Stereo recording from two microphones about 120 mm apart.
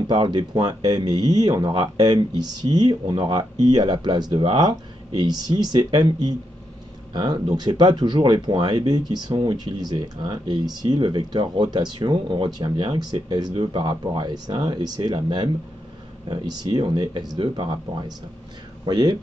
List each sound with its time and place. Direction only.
0.0 s speech: 40° right (ahead or behind)